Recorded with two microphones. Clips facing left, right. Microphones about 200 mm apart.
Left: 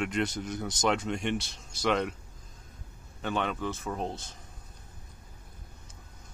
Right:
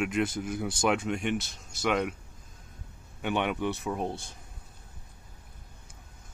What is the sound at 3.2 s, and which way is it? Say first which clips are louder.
Speech: right 2 dB; 15° right (ahead or behind).